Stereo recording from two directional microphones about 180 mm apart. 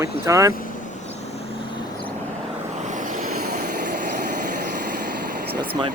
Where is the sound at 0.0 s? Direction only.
15° right (ahead or behind).